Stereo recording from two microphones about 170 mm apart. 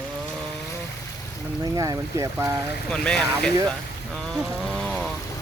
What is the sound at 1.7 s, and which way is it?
Speech, 20° right (ahead or behind).